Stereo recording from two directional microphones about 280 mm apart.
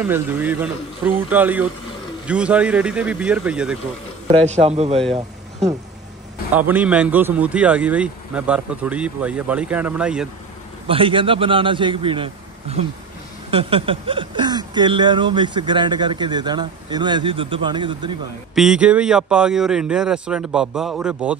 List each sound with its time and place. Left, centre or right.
0.0 s a man's voice: centre
4.5 s speech: right
6.7 s a man's voice: centre
10.9 s speech: centre
18.5 s a man's voice: centre